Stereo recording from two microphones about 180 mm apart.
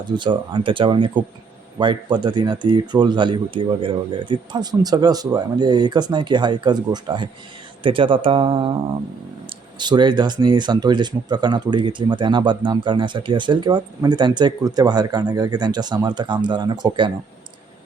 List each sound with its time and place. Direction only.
0.2 s speech: 25° right (ahead or behind)
9.7 s speech: 25° right (ahead or behind)